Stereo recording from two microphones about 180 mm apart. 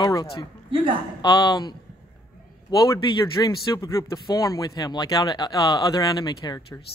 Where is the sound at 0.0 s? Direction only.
20° left (ahead or behind).